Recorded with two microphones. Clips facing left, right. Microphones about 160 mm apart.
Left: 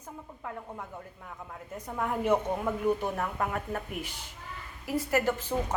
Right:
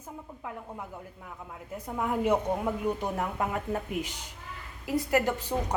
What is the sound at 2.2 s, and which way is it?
Speech, 15° right (ahead or behind).